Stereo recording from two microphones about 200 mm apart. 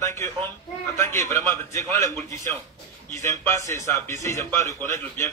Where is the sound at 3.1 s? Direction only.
15° left (ahead or behind).